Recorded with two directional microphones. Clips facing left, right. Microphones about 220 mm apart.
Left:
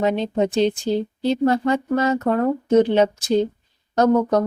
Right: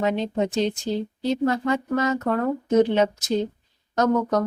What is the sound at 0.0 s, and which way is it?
Speech, 30° left (ahead or behind).